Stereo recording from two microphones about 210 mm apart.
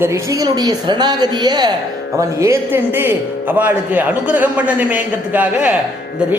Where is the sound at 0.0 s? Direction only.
15° right (ahead or behind).